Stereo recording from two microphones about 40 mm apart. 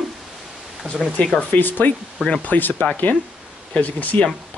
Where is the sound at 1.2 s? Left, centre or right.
Left.